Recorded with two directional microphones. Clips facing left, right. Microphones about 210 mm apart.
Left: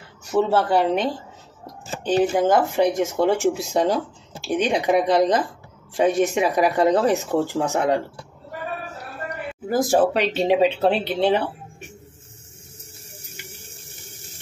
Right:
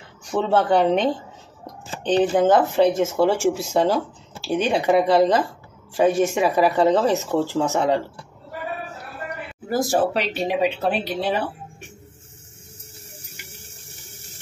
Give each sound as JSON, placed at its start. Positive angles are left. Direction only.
{"t": 0.3, "sound": "speech", "side_deg": 5}
{"t": 9.7, "sound": "speech", "side_deg": 20}